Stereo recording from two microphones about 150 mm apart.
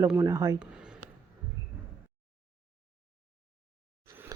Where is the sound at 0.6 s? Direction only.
5° right (ahead or behind).